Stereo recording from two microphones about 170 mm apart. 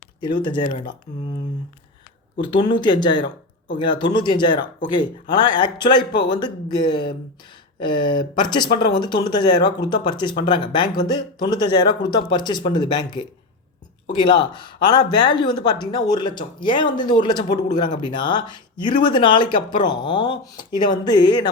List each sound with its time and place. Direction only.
0.2 s speech: 25° left (ahead or behind)
2.4 s speech: 25° left (ahead or behind)